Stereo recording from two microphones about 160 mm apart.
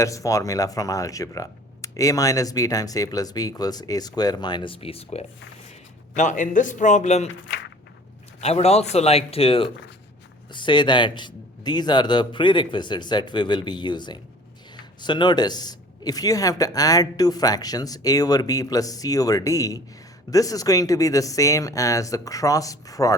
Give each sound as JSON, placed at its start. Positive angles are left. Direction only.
{"t": 0.0, "sound": "speech", "side_deg": 20}
{"t": 6.1, "sound": "a man's voice", "side_deg": 50}
{"t": 8.4, "sound": "speech", "side_deg": 40}